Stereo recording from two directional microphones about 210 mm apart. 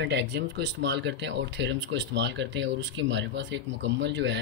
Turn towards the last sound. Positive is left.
turn(degrees=-55)  # may be behind; listen again after turning